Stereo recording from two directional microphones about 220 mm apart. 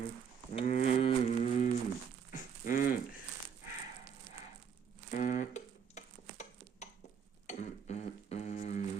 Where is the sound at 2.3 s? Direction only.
35° left (ahead or behind).